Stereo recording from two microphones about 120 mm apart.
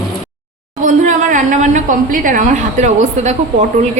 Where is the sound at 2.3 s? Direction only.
90° right.